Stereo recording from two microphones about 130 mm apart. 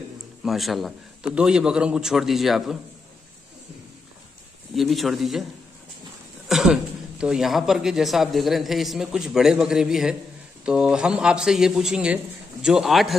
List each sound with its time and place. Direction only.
0.4 s speech: centre (ahead or behind)
4.7 s speech: centre (ahead or behind)
6.5 s speech: 5° right (ahead or behind)